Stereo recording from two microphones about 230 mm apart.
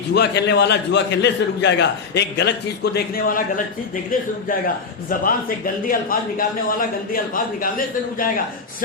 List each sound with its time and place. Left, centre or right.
0.1 s a man's voice: left